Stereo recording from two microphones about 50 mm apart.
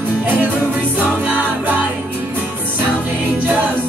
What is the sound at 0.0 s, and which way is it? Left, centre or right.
Music, right.